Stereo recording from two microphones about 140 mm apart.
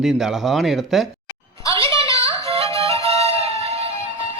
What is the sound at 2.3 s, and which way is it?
Music, 45° right (ahead or behind).